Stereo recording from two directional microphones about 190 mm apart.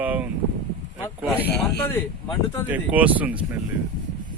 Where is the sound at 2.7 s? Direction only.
10° right (ahead or behind).